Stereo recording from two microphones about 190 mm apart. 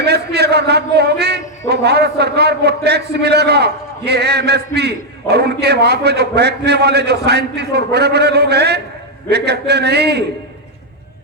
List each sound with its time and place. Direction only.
0.0 s a man's voice: 60° right (ahead or behind)